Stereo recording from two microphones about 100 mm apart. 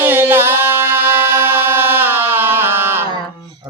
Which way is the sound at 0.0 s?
20° right (ahead or behind).